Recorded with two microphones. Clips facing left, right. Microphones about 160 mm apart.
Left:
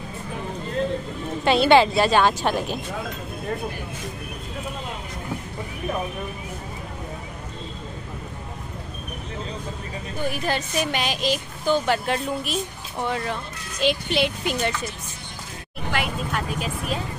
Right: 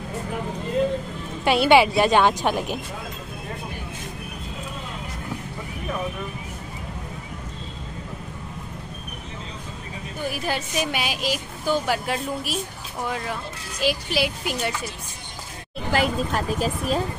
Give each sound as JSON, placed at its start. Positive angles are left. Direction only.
{"t": 1.4, "sound": "a woman's voice", "side_deg": -10}
{"t": 10.3, "sound": "a woman's voice", "side_deg": -5}
{"t": 15.9, "sound": "speech", "side_deg": -35}